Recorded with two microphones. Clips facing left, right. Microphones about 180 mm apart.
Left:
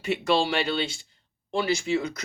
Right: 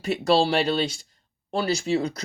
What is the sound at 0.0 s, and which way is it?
Speech, 35° right (ahead or behind).